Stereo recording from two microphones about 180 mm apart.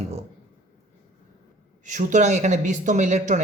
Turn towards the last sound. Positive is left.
turn(degrees=-40)  # may be behind; listen again after turning